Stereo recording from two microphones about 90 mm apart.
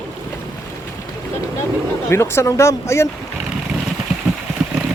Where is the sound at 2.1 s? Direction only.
30° left (ahead or behind).